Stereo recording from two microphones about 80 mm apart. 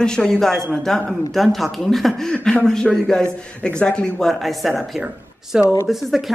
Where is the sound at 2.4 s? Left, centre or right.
Centre.